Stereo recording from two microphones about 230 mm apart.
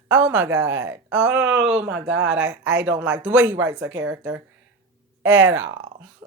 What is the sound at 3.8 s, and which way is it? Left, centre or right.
Speech, right.